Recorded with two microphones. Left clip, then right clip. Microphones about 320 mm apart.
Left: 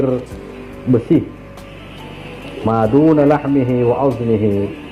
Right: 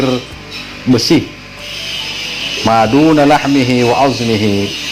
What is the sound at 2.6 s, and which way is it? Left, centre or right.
Speech, right.